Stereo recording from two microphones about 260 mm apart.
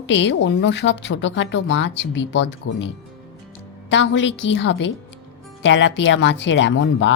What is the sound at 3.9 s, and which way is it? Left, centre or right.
A woman's voice, left.